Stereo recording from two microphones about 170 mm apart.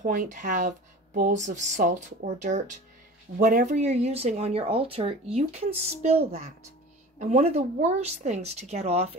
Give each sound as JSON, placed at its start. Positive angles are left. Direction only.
{"t": 0.0, "sound": "speech", "side_deg": -50}